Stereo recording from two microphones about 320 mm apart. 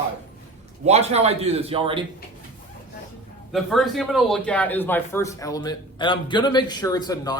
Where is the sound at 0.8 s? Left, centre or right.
Centre.